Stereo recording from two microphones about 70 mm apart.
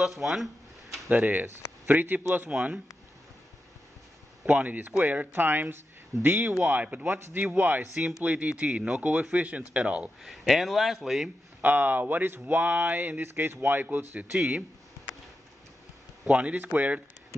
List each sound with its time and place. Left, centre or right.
0.0 s speech: centre
1.0 s a man's voice: right
4.5 s a man's voice: right
10.2 s speech: centre
11.6 s a man's voice: right
16.3 s a man's voice: centre